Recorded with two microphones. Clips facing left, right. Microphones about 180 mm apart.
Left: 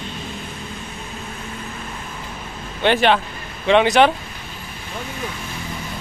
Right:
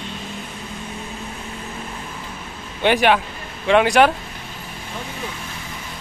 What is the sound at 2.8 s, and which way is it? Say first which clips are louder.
Speech: even; 10° right (ahead or behind).